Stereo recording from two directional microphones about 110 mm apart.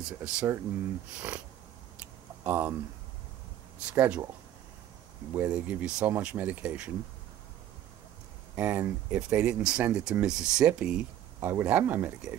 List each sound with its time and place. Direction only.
0.0 s speech: 10° right (ahead or behind)
2.0 s a sound: 15° right (ahead or behind)
3.8 s speech: 10° right (ahead or behind)
5.3 s speech: 15° right (ahead or behind)
8.5 s speech: 15° right (ahead or behind)
11.3 s speech: 20° right (ahead or behind)